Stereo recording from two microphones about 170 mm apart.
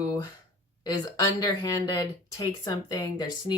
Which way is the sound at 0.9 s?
20° left (ahead or behind).